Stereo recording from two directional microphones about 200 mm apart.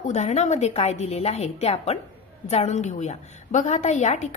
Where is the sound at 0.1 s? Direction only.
35° left (ahead or behind).